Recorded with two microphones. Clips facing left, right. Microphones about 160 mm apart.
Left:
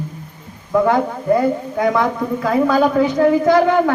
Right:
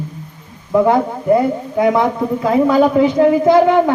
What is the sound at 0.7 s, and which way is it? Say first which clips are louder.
Speech: right 2 dB; 20° right (ahead or behind).